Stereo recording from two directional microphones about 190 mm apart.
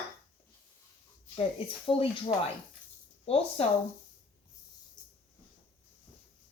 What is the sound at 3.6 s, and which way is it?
Speech, 30° left (ahead or behind).